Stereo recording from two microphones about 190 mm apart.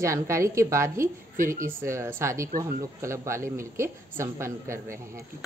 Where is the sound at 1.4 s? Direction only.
45° right (ahead or behind).